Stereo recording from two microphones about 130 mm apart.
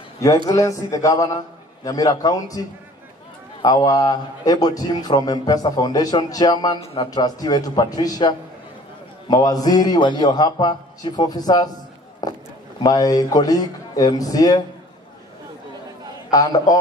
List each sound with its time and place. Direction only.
0.5 s a man's voice: 25° left (ahead or behind)
3.6 s a man's voice: 30° left (ahead or behind)
12.2 s a sound: 30° left (ahead or behind)
12.8 s a man's voice: 30° left (ahead or behind)
16.3 s a man's voice: 30° left (ahead or behind)